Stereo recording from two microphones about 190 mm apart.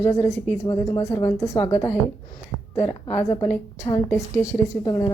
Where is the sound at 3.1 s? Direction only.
20° left (ahead or behind).